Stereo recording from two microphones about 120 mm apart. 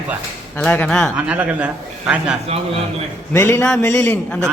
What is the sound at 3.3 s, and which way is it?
Speech, 20° left (ahead or behind).